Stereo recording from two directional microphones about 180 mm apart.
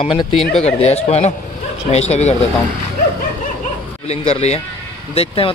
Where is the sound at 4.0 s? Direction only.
35° left (ahead or behind).